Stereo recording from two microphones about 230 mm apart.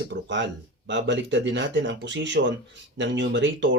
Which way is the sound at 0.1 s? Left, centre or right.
Right.